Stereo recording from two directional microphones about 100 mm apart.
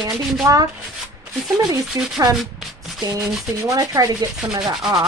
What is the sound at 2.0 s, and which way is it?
Speech, 35° right (ahead or behind).